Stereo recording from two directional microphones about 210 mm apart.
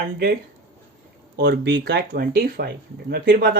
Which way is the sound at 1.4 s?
55° right (ahead or behind).